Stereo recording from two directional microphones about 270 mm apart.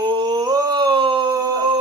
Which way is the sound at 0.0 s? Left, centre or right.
Centre.